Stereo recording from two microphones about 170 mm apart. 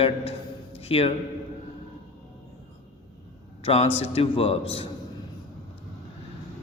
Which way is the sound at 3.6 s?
35° left (ahead or behind).